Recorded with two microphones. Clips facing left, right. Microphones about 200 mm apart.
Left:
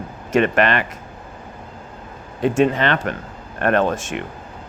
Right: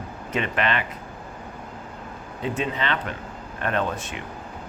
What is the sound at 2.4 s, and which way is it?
Speech, 75° left (ahead or behind).